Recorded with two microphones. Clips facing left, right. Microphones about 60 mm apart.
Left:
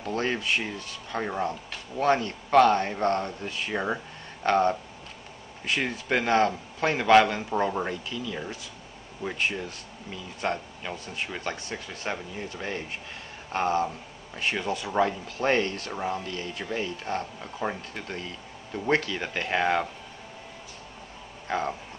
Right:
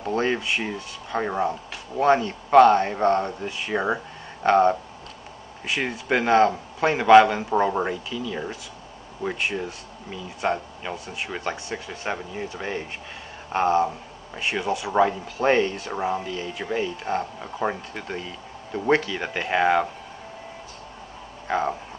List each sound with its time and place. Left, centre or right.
0.1 s speech: centre
15.7 s speech: centre
21.5 s speech: centre